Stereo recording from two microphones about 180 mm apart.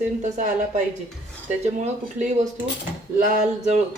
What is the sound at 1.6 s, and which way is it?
Speech, 40° right (ahead or behind).